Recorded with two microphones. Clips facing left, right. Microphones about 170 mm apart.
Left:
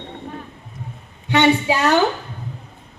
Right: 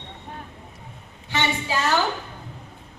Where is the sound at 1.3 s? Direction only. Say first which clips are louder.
Left 9 dB; 65° left (ahead or behind).